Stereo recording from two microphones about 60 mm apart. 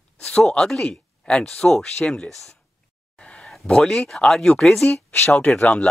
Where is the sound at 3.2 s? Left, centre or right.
Centre.